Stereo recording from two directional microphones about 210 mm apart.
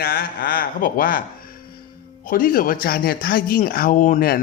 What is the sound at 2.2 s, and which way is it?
Speech, 40° left (ahead or behind).